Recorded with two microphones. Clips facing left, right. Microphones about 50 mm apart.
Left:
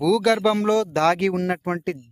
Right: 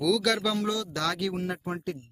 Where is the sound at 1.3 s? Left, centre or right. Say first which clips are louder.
Left 8 dB; left.